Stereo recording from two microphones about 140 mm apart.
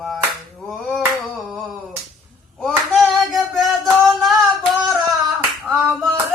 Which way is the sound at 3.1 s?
Centre (ahead or behind).